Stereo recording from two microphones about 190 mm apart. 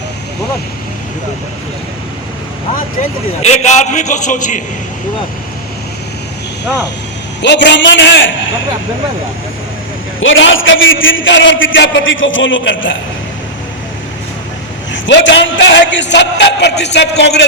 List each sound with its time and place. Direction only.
3.4 s a man's voice: 35° left (ahead or behind)
7.4 s a man's voice: 65° left (ahead or behind)
10.2 s a man's voice: 90° left
14.9 s a man's voice: 75° left (ahead or behind)